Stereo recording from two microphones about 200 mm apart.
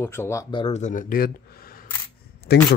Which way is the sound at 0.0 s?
15° left (ahead or behind).